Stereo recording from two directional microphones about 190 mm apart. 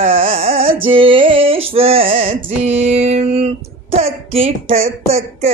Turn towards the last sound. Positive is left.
turn(degrees=-35)  # may be behind; listen again after turning